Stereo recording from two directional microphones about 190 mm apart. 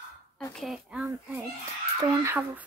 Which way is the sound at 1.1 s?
15° right (ahead or behind).